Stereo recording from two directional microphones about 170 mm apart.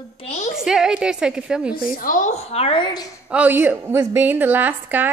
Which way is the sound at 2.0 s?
50° left (ahead or behind).